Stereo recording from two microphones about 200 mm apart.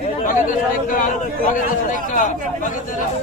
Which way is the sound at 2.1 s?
40° left (ahead or behind).